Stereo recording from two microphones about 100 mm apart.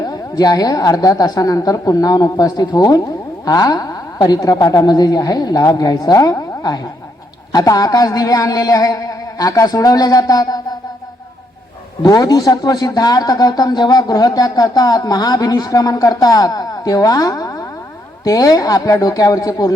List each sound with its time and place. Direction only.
0.0 s a man's voice: 40° left (ahead or behind)
12.0 s a man's voice: 40° left (ahead or behind)